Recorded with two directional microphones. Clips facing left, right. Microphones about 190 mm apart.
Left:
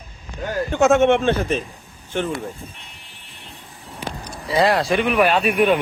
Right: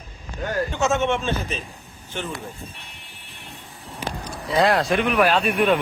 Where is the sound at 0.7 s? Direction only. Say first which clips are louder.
Left 9 dB; 55° left (ahead or behind).